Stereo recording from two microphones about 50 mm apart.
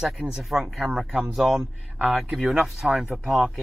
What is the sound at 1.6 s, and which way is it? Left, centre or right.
Speech, right.